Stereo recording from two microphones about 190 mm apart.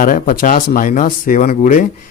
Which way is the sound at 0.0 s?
45° left (ahead or behind).